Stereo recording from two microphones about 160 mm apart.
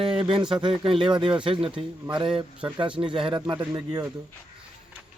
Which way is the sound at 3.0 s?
35° right (ahead or behind).